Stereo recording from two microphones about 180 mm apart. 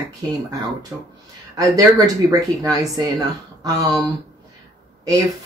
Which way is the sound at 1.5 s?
20° right (ahead or behind).